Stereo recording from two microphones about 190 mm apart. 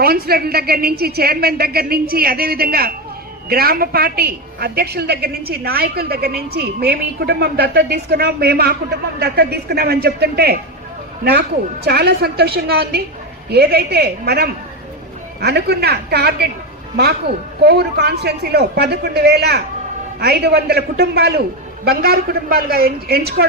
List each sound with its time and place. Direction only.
0.0 s a woman's voice: 55° right (ahead or behind)
17.6 s a woman's voice: 60° right (ahead or behind)